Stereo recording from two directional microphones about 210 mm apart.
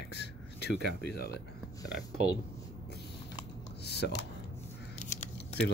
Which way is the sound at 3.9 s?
50° left (ahead or behind).